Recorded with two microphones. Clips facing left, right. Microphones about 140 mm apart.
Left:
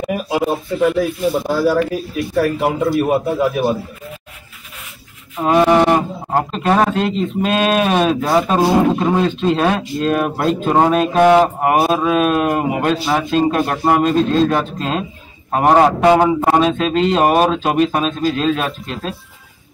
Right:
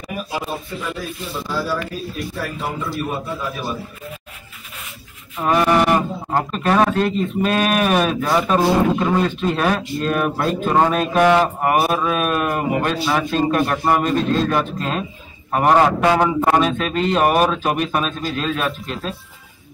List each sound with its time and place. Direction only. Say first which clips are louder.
0.3 s speech: left 9 dB; 80° left
5.4 s a sound: left 4 dB; 20° left (ahead or behind)
6.5 s speech: left 1 dB; 25° left (ahead or behind)